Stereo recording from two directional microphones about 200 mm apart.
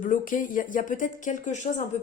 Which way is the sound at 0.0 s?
40° left (ahead or behind).